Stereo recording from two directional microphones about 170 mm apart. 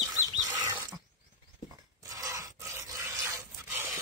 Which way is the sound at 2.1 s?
20° right (ahead or behind).